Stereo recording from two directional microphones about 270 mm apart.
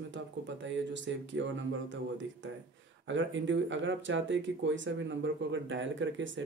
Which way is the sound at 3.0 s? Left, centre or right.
Right.